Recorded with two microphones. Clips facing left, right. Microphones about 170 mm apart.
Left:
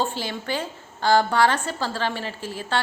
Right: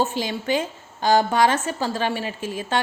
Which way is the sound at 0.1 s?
15° right (ahead or behind).